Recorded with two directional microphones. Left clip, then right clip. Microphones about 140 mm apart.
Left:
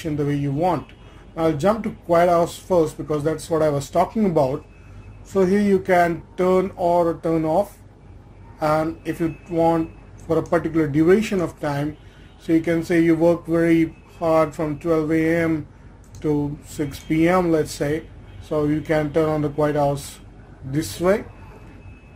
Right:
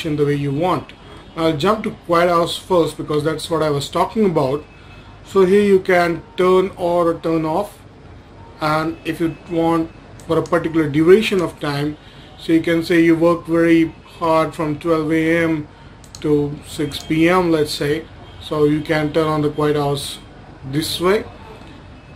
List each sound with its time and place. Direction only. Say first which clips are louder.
0.0 s speech: right 6 dB; 35° left (ahead or behind)
8.5 s speech: right 1 dB; 35° left (ahead or behind)
16.7 s speech: right 2 dB; 35° left (ahead or behind)